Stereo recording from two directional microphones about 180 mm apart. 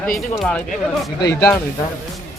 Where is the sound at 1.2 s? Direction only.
20° left (ahead or behind).